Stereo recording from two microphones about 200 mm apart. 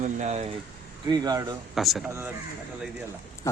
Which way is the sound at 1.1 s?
20° right (ahead or behind).